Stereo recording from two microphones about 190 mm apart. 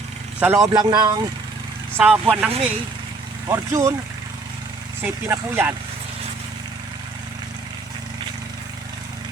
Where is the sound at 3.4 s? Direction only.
15° right (ahead or behind).